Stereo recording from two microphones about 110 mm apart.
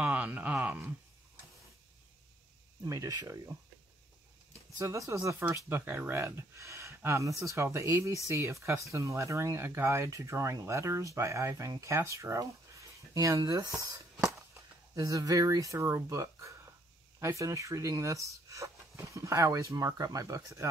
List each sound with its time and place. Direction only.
0.0 s a sound: 10° right (ahead or behind)
2.8 s speech: 30° right (ahead or behind)
4.7 s speech: 30° right (ahead or behind)